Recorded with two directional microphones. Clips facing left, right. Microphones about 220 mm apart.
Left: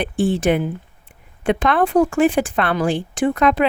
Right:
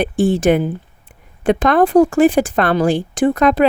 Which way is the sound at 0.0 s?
40° right (ahead or behind).